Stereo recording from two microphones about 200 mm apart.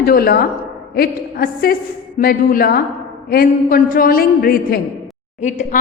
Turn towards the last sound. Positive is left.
turn(degrees=40)  # may be behind; listen again after turning